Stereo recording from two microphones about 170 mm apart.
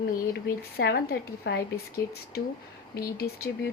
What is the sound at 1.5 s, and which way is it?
Speech, 90° left.